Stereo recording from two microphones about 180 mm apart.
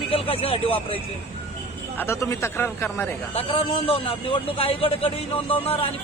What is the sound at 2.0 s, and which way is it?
Speech, 15° left (ahead or behind).